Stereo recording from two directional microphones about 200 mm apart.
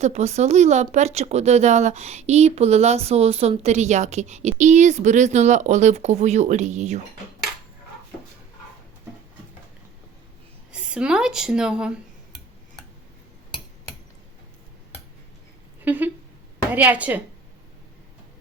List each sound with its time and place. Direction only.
0.0 s speech: 35° right (ahead or behind)
10.7 s a woman's voice: 5° right (ahead or behind)
15.8 s speech: 10° right (ahead or behind)